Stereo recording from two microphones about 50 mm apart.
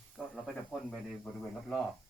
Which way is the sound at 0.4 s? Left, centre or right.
Centre.